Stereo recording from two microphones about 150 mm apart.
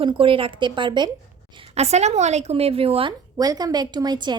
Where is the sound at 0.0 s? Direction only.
35° right (ahead or behind).